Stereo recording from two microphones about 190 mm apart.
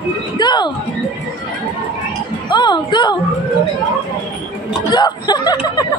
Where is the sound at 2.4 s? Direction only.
25° left (ahead or behind).